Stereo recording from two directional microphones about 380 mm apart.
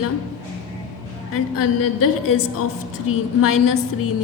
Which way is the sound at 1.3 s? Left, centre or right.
Left.